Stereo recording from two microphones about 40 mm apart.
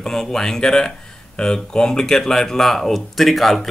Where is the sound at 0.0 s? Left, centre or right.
Centre.